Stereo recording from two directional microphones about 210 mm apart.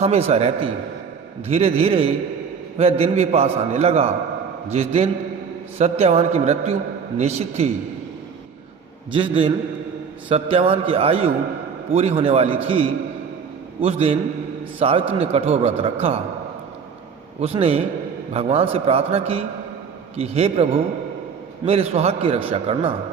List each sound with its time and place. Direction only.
0.0 s a man's voice: 30° right (ahead or behind)
9.1 s a man's voice: 25° right (ahead or behind)
17.4 s a man's voice: 30° right (ahead or behind)